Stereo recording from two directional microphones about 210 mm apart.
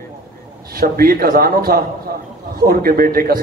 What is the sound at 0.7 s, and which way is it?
A man's voice, 45° right (ahead or behind).